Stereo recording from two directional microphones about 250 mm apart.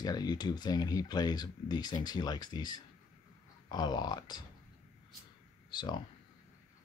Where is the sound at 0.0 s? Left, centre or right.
Centre.